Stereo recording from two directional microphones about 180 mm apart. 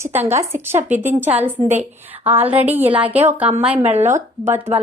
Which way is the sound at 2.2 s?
10° right (ahead or behind).